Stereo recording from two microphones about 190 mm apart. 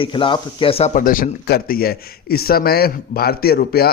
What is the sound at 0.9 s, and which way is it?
Speech, 45° left (ahead or behind).